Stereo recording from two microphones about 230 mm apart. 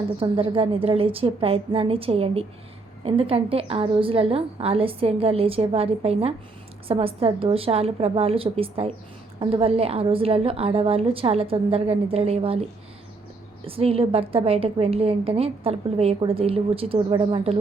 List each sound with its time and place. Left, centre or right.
0.2 s a woman's voice: right
13.7 s a woman's voice: right